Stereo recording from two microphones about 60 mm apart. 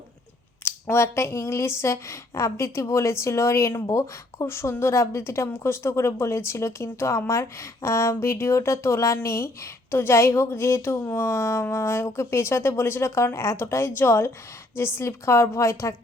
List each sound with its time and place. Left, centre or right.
0.6 s a woman's voice: left